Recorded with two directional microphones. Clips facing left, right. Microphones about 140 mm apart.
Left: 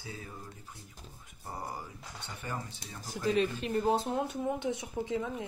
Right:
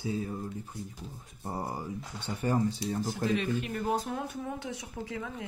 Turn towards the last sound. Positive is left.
turn(degrees=25)  # may be behind; listen again after turning